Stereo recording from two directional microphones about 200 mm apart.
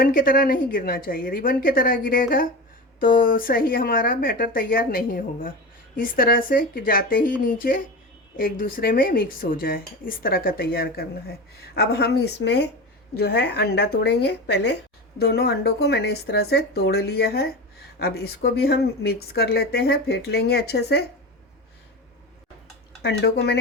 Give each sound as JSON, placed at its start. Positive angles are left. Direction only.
{"t": 0.0, "sound": "a woman's voice", "side_deg": 45}
{"t": 23.0, "sound": "a woman's voice", "side_deg": 55}